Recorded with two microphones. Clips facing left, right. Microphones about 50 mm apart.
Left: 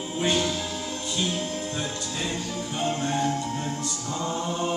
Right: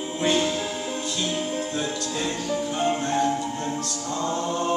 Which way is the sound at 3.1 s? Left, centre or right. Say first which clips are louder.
Right 3 dB; centre.